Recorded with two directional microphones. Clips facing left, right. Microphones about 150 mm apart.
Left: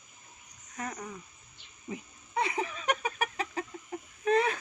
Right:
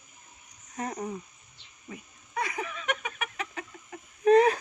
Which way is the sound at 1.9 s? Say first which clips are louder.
Left 2 dB; 25° left (ahead or behind).